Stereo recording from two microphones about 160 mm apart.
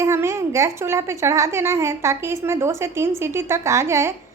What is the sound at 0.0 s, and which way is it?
A woman's voice, 15° right (ahead or behind).